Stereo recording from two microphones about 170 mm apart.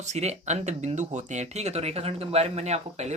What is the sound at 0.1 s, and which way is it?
Speech, 40° right (ahead or behind).